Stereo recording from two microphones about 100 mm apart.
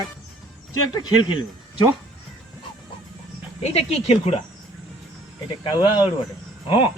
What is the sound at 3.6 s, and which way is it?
Speech, 90° left.